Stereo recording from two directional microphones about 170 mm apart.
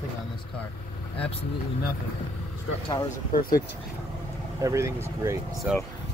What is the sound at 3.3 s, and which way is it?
Speech, 60° left (ahead or behind).